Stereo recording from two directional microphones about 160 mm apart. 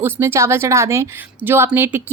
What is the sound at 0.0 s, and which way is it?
A woman's voice, 15° right (ahead or behind).